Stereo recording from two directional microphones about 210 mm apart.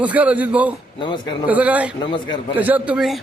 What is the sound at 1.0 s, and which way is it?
Speech, 20° left (ahead or behind).